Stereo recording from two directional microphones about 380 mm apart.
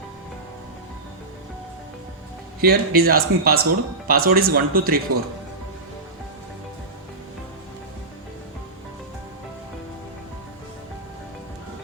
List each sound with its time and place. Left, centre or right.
2.6 s speech: right